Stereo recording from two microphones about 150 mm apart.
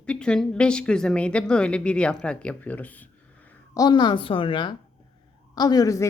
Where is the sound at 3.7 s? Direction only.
30° left (ahead or behind).